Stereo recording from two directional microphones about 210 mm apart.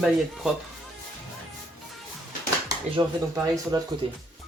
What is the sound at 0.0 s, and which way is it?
Speech, centre (ahead or behind).